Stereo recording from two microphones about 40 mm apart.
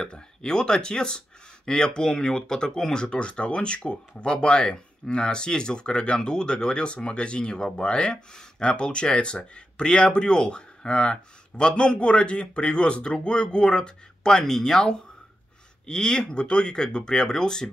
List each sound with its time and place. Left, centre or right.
0.0 s speech: left